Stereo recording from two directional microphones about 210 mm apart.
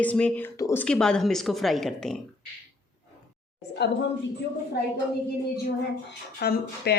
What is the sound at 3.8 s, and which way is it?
Speech, 55° left (ahead or behind).